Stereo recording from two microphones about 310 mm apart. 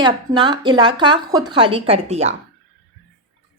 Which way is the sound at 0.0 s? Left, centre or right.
Centre.